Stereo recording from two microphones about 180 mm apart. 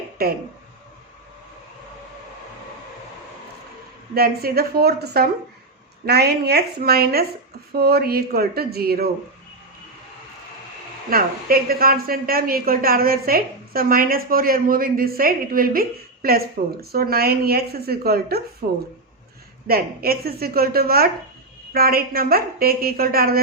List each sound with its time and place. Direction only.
0.2 s speech: 55° right (ahead or behind)
4.1 s a woman's voice: 60° right (ahead or behind)
11.1 s a woman's voice: 55° right (ahead or behind)
19.6 s a woman's voice: 55° right (ahead or behind)